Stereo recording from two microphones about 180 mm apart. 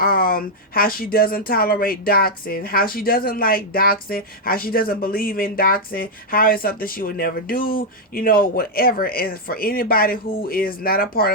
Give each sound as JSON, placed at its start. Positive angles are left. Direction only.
{"t": 0.0, "sound": "speech", "side_deg": 55}